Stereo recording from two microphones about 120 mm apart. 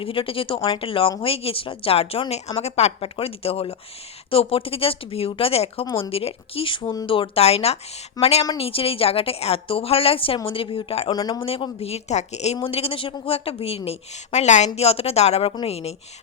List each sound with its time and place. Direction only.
0.0 s a woman's voice: 50° left (ahead or behind)
11.1 s speech: 35° left (ahead or behind)
11.3 s a woman's voice: 50° left (ahead or behind); by 12.5 s 65° left (ahead or behind)
12.6 s a woman's voice: 50° left (ahead or behind); by 14.7 s 75° left (ahead or behind)
14.8 s a woman's voice: 55° left (ahead or behind)